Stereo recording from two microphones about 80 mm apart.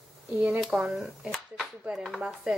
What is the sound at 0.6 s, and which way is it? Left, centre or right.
Speech, centre.